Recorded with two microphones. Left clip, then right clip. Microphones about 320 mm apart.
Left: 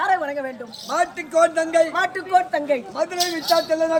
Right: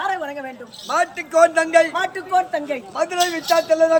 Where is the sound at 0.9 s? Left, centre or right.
Centre.